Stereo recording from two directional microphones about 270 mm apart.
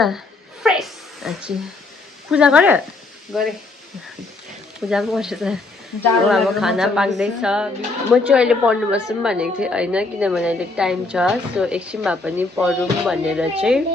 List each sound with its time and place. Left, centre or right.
0.6 s a sound: centre
2.3 s a woman's voice: centre
4.9 s a woman's voice: centre